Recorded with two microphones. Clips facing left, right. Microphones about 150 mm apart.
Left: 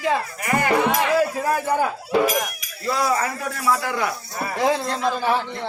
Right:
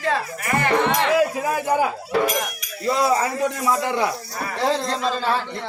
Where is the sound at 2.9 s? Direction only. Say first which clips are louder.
Right 2 dB; 25° right (ahead or behind).